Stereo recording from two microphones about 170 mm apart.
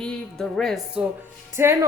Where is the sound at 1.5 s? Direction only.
15° right (ahead or behind).